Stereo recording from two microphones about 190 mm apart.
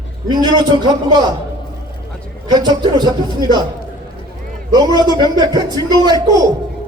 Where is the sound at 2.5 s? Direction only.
20° right (ahead or behind).